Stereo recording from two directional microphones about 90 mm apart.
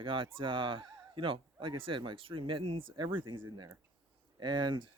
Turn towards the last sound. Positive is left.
turn(degrees=-60)  # may be behind; listen again after turning